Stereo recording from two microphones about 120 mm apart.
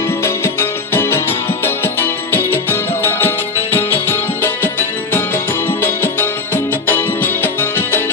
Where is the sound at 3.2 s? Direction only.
20° left (ahead or behind).